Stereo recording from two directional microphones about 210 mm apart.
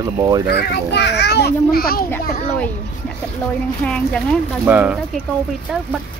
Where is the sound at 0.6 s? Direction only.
50° left (ahead or behind).